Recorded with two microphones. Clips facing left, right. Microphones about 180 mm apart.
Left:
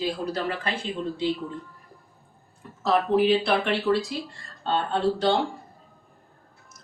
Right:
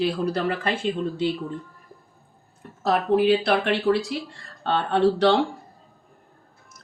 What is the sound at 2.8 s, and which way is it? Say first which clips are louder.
Speech: right 1 dB; 55° right (ahead or behind).